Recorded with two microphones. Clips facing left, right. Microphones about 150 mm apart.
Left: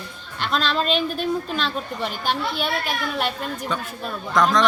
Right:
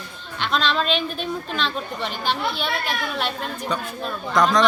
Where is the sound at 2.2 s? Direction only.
45° left (ahead or behind).